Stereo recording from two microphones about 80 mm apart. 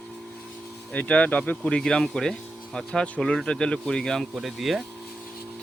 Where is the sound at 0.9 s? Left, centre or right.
Centre.